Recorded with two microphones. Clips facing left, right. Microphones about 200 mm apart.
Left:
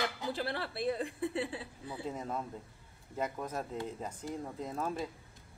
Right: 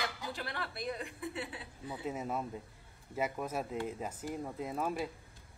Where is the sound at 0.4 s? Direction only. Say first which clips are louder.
Left 6 dB; 30° left (ahead or behind).